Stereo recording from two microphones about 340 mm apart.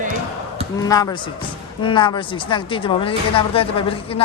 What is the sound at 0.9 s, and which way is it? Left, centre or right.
A woman's voice, centre.